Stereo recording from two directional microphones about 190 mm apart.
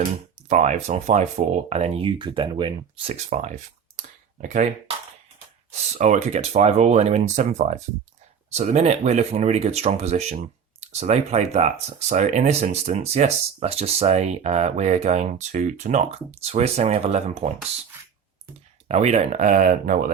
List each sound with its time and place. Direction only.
0.4 s speech: 40° right (ahead or behind)
5.7 s speech: 35° right (ahead or behind)
18.9 s speech: 35° right (ahead or behind)